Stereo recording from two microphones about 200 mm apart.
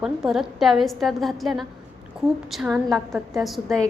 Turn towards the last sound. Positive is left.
turn(degrees=0)  # may be behind; listen again after turning